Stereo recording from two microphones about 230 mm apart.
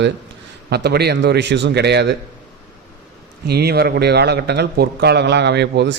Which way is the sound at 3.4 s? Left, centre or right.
Right.